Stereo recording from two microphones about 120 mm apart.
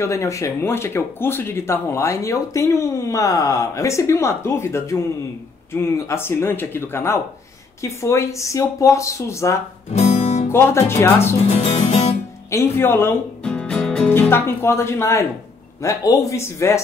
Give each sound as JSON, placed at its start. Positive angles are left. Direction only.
{"t": 0.0, "sound": "speech", "side_deg": 25}
{"t": 9.9, "sound": "music", "side_deg": 60}
{"t": 10.5, "sound": "speech", "side_deg": 20}
{"t": 11.4, "sound": "speech", "side_deg": 60}
{"t": 12.4, "sound": "speech", "side_deg": 20}
{"t": 13.4, "sound": "speech", "side_deg": 10}